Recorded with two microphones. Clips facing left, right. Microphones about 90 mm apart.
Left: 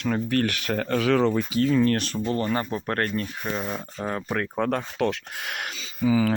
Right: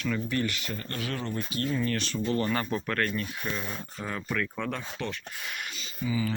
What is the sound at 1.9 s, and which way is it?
Speech, 50° left (ahead or behind).